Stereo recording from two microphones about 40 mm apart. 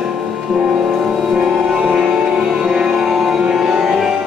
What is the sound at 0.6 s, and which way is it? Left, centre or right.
Music, right.